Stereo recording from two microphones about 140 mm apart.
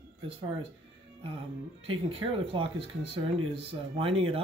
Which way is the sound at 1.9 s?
40° right (ahead or behind).